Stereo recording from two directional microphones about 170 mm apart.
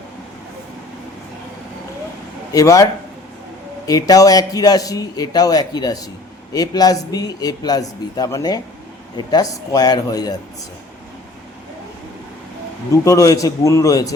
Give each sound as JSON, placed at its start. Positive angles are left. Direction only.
{"t": 2.5, "sound": "a man's voice", "side_deg": 20}
{"t": 3.8, "sound": "a man's voice", "side_deg": 20}
{"t": 12.9, "sound": "a man's voice", "side_deg": 20}